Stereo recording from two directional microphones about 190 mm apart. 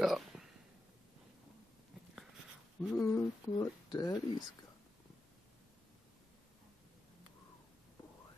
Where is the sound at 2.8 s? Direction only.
Centre (ahead or behind).